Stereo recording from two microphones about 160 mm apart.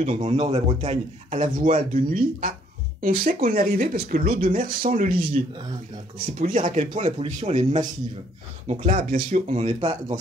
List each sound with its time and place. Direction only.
0.0 s speech: 45° right (ahead or behind)